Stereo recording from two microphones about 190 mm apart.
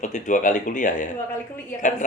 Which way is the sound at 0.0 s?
40° left (ahead or behind).